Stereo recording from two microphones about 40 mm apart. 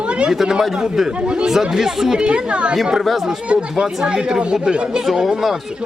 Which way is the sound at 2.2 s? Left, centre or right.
Right.